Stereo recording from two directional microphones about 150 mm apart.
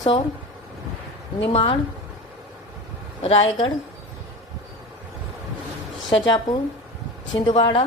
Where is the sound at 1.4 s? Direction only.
40° left (ahead or behind).